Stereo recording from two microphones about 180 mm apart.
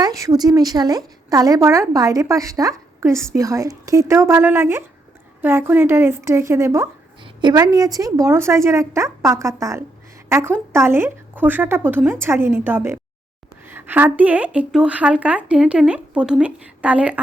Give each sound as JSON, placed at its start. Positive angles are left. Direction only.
{"t": 0.0, "sound": "a woman's voice", "side_deg": -20}